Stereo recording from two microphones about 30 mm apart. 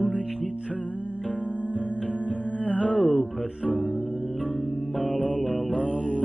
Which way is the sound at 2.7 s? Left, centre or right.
Left.